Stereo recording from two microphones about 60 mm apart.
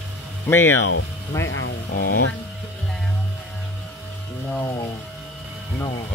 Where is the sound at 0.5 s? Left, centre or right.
Left.